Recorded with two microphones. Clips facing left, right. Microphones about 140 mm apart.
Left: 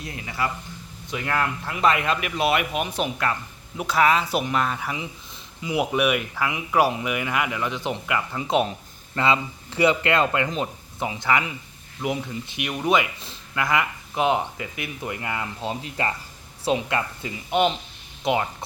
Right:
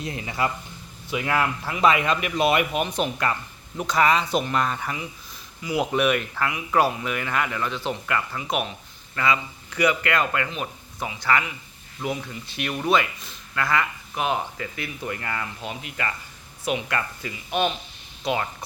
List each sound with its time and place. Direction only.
0.0 s speech: 25° right (ahead or behind)
1.1 s speech: 5° right (ahead or behind); by 13.1 s 15° left (ahead or behind)
13.1 s speech: 30° left (ahead or behind)
13.6 s speech: 20° left (ahead or behind)
15.6 s speech: 30° left (ahead or behind)